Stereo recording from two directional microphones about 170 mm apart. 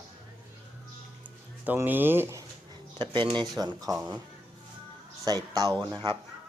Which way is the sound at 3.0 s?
30° right (ahead or behind).